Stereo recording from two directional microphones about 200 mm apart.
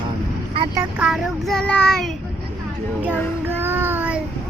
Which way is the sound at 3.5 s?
10° right (ahead or behind).